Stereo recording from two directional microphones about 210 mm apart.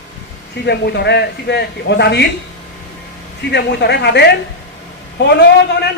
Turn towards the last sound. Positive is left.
turn(degrees=50)  # may be behind; listen again after turning